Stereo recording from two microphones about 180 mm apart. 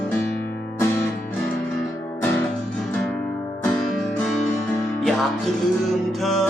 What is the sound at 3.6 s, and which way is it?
Music, 5° left (ahead or behind).